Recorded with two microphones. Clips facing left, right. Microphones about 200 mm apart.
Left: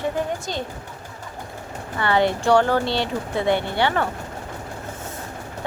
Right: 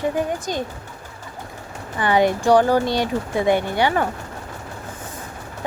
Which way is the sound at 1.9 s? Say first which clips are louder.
Right 2 dB; 15° right (ahead or behind).